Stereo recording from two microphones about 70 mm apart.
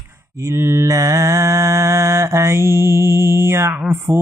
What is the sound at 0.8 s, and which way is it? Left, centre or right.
Mantra, right.